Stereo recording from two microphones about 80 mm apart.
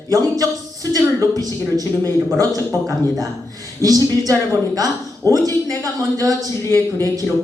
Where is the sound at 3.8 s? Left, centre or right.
Right.